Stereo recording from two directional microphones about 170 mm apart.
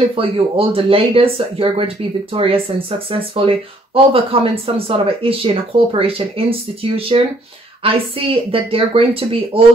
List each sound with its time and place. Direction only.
0.1 s speech: 35° right (ahead or behind)